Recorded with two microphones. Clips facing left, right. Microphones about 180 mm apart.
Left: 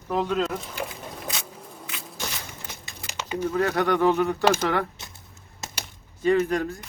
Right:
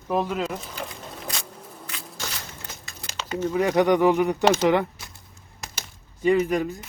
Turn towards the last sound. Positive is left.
turn(degrees=-15)  # may be behind; listen again after turning